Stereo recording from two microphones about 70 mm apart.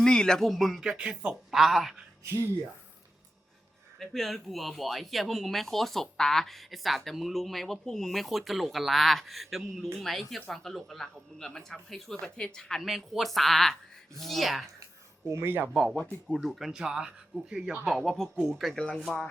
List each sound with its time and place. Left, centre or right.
0.0 s speech: centre
4.0 s speech: centre
15.3 s speech: right
15.7 s speech: centre
17.8 s speech: centre
18.7 s speech: centre